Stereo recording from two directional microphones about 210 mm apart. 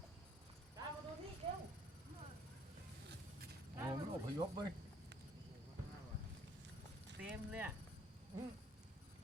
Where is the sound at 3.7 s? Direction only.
15° right (ahead or behind).